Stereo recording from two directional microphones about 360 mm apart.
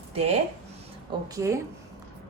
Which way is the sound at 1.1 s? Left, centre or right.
Centre.